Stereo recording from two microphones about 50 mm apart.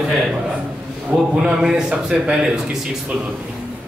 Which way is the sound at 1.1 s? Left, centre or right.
Right.